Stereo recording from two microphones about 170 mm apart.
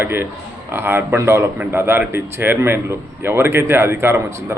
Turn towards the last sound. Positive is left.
turn(degrees=-15)  # may be behind; listen again after turning